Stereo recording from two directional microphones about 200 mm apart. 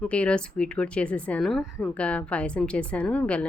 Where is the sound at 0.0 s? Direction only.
5° left (ahead or behind).